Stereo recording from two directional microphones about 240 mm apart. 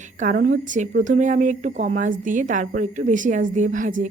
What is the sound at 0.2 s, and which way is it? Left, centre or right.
A woman's voice, right.